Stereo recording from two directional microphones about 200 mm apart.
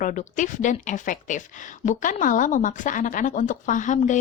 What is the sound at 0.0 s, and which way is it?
Speech, 40° left (ahead or behind).